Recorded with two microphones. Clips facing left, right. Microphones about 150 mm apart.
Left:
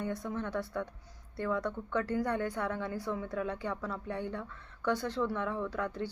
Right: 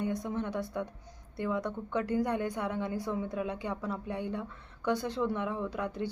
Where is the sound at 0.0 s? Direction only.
15° right (ahead or behind).